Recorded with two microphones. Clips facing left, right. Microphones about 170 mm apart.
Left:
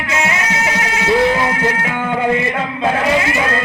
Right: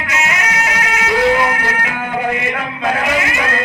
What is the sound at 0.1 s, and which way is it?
Music, 25° left (ahead or behind).